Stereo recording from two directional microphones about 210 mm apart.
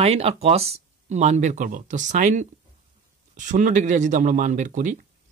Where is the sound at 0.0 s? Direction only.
30° right (ahead or behind).